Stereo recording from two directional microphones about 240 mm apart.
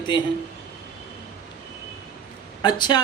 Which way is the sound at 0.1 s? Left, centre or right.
Centre.